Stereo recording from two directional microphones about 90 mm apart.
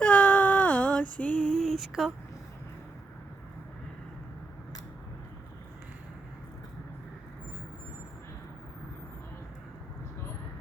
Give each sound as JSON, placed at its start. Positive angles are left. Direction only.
{"t": 0.0, "sound": "female singing", "side_deg": 15}
{"t": 1.8, "sound": "a woman's voice", "side_deg": -5}